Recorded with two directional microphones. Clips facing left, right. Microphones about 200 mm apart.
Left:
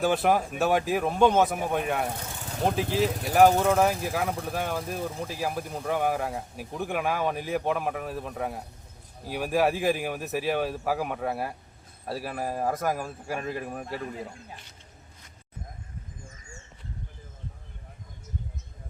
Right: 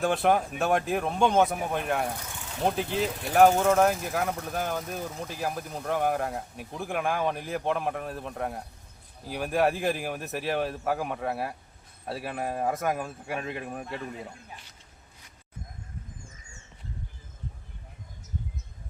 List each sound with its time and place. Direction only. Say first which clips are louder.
0.0 s speech: left 1 dB; centre (ahead or behind)
4.9 s speech: left 3 dB; 30° left (ahead or behind)
5.3 s speech: left 2 dB; 5° left (ahead or behind)